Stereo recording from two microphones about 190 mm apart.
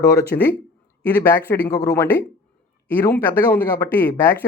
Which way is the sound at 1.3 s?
15° left (ahead or behind).